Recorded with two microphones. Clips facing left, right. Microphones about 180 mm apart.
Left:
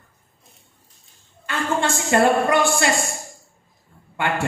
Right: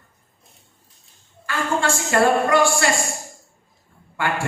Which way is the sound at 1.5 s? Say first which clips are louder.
Even; 20° left (ahead or behind).